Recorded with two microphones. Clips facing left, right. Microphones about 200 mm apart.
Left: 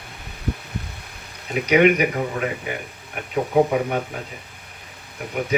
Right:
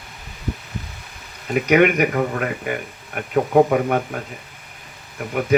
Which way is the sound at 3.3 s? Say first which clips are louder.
Right 3 dB; 55° right (ahead or behind).